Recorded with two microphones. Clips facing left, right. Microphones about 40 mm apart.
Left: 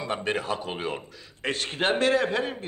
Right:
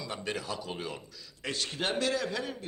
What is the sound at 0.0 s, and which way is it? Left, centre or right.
A man's voice, left.